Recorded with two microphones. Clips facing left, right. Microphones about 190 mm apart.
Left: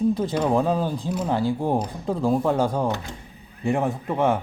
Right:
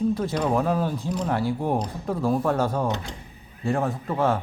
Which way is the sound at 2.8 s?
20° right (ahead or behind).